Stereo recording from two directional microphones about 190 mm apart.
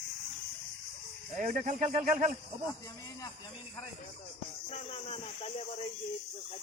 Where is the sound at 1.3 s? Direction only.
45° right (ahead or behind).